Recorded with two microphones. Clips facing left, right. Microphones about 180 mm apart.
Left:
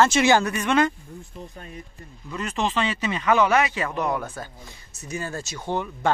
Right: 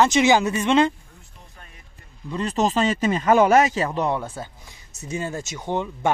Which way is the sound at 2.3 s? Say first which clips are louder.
Right 4 dB; 35° right (ahead or behind).